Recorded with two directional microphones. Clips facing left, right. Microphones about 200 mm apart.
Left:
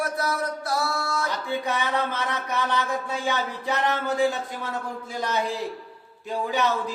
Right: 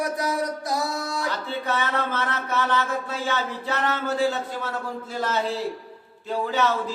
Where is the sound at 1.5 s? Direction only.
15° left (ahead or behind).